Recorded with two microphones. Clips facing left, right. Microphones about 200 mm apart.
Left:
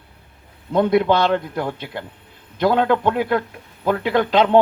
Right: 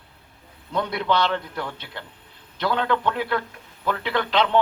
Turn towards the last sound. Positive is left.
turn(degrees=45)  # may be behind; listen again after turning